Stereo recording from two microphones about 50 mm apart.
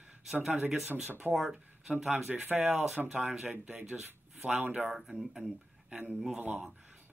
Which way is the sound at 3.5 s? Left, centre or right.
Right.